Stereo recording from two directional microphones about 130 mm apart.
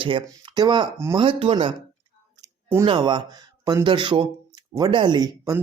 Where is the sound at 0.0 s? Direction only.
40° right (ahead or behind).